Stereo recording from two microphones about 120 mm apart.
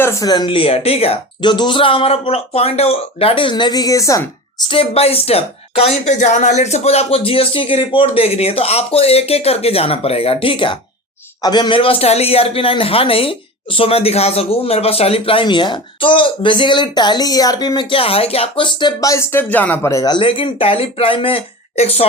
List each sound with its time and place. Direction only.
0.0 s speech: 25° left (ahead or behind); by 1.2 s 55° left (ahead or behind)
1.4 s speech: 40° left (ahead or behind)
4.7 s a woman's voice: 50° left (ahead or behind); by 17.8 s 35° left (ahead or behind)
17.9 s speech: 55° left (ahead or behind); by 20.1 s 30° left (ahead or behind)
20.1 s speech: 45° left (ahead or behind)